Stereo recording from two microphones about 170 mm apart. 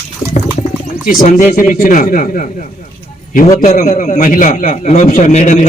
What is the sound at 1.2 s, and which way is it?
A man's voice, 45° left (ahead or behind).